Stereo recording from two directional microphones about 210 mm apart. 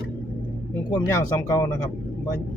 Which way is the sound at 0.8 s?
15° left (ahead or behind).